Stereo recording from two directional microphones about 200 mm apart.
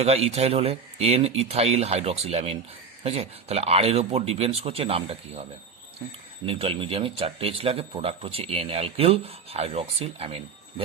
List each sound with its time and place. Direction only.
0.0 s speech: 30° right (ahead or behind)